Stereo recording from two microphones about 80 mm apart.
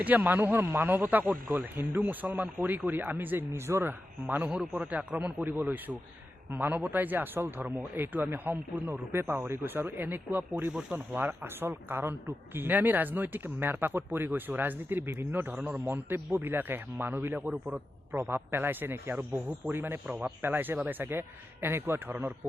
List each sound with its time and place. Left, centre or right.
0.0 s a man's voice: right
4.4 s a man's voice: centre
10.7 s speech: centre
10.9 s a man's voice: right
15.9 s a man's voice: right
20.1 s speech: centre
20.4 s a man's voice: right